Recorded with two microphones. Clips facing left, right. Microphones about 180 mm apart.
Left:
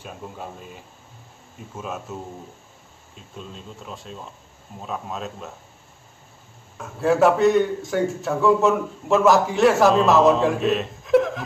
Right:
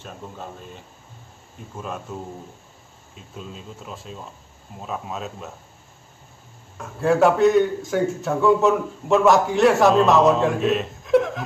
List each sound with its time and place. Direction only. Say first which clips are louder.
0.0 s a man's voice: left 1 dB; 5° left (ahead or behind)
6.8 s a man's voice: even; centre (ahead or behind)